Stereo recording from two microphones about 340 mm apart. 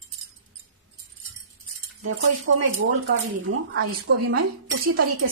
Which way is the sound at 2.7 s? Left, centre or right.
Right.